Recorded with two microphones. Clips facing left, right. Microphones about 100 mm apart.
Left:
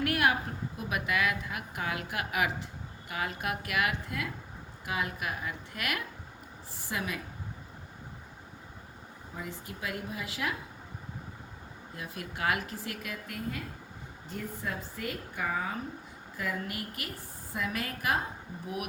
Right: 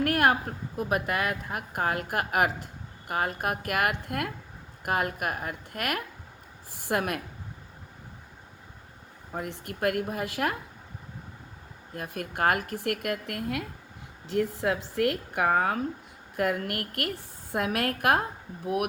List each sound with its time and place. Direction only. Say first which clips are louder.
0.0 s a woman's voice: right 4 dB; 45° right (ahead or behind)
6.8 s speech: right 7 dB; 60° right (ahead or behind)
9.3 s speech: right 6 dB; 65° right (ahead or behind)
11.9 s speech: right 7 dB; 55° right (ahead or behind)
14.3 s speech: right 11 dB; 80° right; by 18.9 s 60° right (ahead or behind)